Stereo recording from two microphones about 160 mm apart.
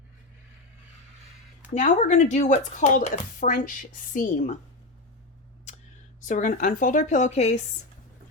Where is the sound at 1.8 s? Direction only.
50° left (ahead or behind).